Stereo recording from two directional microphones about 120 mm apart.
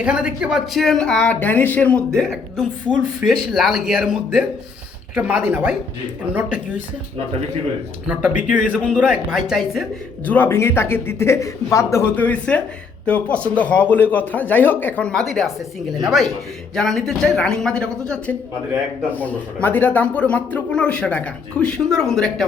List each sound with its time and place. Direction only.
0.0 s speech: 10° right (ahead or behind)
8.0 s speech: 10° right (ahead or behind)
10.2 s speech: 15° left (ahead or behind)